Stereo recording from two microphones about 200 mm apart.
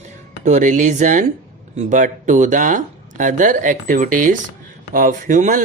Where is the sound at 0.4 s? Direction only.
35° right (ahead or behind).